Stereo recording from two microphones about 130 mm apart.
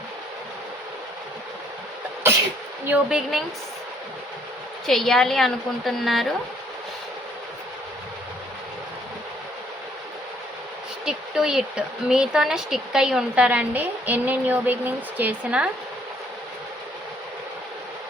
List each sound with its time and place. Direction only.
2.8 s a woman's voice: 10° right (ahead or behind)
4.9 s a woman's voice: 5° left (ahead or behind)
11.0 s a woman's voice: 5° right (ahead or behind)